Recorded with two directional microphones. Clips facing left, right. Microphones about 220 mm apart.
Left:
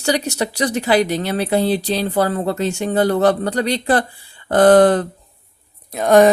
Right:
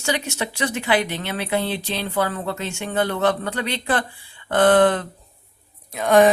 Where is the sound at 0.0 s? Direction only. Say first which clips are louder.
Left 6 dB; 35° left (ahead or behind).